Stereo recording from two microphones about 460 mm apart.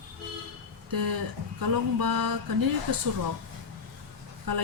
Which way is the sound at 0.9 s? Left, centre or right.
Right.